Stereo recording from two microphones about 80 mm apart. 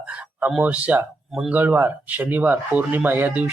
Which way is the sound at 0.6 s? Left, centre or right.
Centre.